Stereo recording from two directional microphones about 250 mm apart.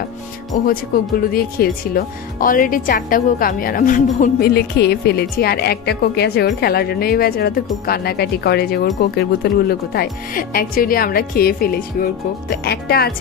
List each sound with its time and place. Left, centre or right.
0.7 s speech: left